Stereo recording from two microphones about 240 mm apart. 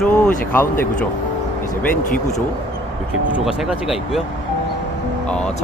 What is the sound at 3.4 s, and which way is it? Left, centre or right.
Speech, centre.